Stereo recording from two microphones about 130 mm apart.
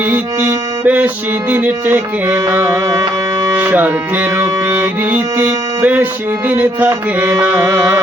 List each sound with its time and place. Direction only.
0.9 s music: 10° right (ahead or behind)